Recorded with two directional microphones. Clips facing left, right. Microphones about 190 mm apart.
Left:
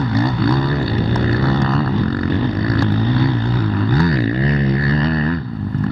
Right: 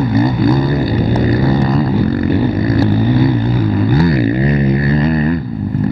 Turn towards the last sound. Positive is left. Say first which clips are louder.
# right 4 dB
turn(degrees=-20)  # may be behind; listen again after turning